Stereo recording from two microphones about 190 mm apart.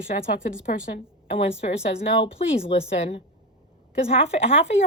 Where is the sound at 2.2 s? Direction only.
30° left (ahead or behind).